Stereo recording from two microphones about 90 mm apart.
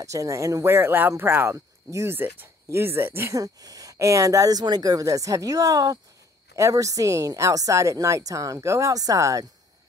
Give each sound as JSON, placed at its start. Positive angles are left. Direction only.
{"t": 0.0, "sound": "speech", "side_deg": -35}
{"t": 3.3, "sound": "a woman's voice", "side_deg": -40}